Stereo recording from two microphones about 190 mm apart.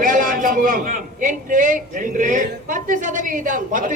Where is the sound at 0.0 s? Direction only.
45° right (ahead or behind).